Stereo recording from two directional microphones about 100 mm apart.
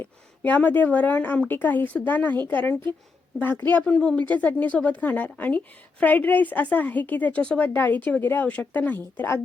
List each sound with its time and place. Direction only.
0.0 s speech: 15° left (ahead or behind)